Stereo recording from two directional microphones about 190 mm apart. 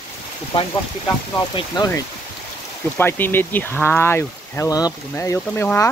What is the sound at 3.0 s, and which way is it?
Speech, 10° left (ahead or behind).